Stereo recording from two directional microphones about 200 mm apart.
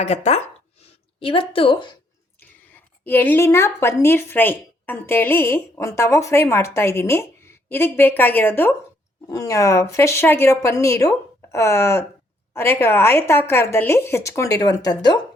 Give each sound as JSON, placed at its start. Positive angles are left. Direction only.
{"t": 0.0, "sound": "speech", "side_deg": 35}
{"t": 2.4, "sound": "a woman's voice", "side_deg": 10}